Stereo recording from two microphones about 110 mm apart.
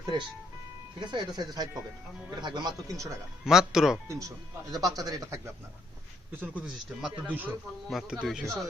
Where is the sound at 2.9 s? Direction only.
30° right (ahead or behind).